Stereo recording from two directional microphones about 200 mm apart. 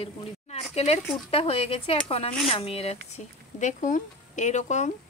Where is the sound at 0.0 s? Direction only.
30° left (ahead or behind).